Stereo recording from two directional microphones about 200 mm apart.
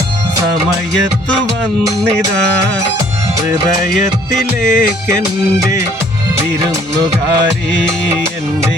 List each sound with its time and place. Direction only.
3.9 s music: 40° left (ahead or behind)